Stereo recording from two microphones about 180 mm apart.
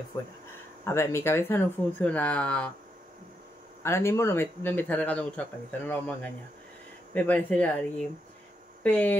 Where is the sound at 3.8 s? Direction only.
15° left (ahead or behind).